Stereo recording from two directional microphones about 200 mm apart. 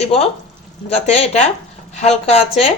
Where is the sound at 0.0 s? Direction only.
30° left (ahead or behind).